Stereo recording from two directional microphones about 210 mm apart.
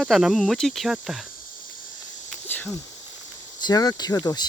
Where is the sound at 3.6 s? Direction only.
20° left (ahead or behind).